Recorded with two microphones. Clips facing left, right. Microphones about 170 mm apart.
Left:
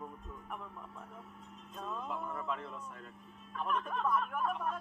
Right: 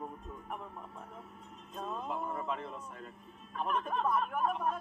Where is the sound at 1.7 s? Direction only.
30° right (ahead or behind).